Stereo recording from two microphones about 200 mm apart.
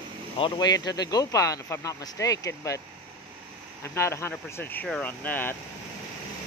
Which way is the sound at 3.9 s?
15° left (ahead or behind).